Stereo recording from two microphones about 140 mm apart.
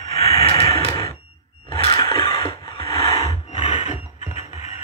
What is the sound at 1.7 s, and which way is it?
Music, 40° left (ahead or behind).